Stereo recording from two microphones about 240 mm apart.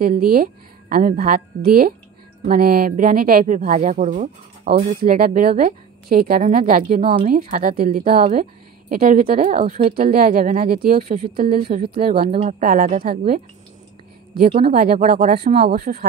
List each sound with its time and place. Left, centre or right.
0.0 s speech: right
7.0 s speech: right
7.2 s speech: right
12.3 s speech: right
14.7 s speech: right